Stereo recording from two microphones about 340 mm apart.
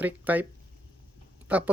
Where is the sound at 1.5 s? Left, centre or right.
Centre.